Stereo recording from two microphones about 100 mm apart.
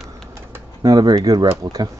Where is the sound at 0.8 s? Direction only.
45° right (ahead or behind).